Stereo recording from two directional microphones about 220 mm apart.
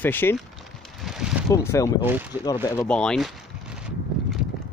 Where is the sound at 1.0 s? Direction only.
Centre (ahead or behind).